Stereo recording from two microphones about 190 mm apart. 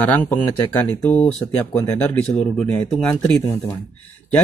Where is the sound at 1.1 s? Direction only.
35° left (ahead or behind).